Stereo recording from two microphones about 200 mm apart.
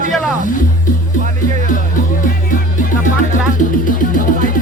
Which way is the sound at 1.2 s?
35° right (ahead or behind).